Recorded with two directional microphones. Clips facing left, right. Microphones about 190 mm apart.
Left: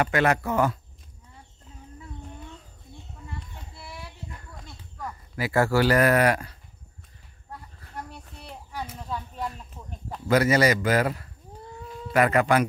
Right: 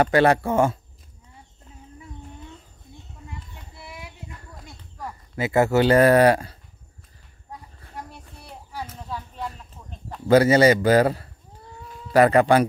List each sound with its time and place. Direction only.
0.0 s a man's voice: 35° right (ahead or behind)
5.0 s speech: 25° right (ahead or behind)
8.7 s a sound: 5° right (ahead or behind)
10.2 s a man's voice: 30° right (ahead or behind)